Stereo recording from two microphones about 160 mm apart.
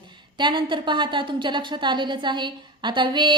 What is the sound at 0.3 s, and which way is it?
A woman's voice, 30° right (ahead or behind).